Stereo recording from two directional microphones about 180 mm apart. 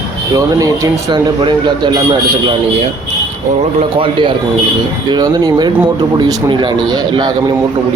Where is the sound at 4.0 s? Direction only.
25° right (ahead or behind).